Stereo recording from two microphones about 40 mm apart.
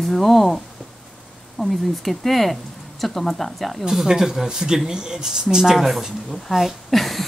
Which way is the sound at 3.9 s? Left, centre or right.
Centre.